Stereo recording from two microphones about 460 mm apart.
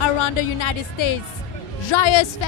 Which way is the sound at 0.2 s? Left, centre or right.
Left.